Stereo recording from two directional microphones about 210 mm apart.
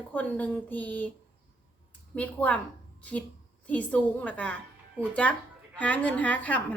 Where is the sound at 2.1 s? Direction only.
5° left (ahead or behind).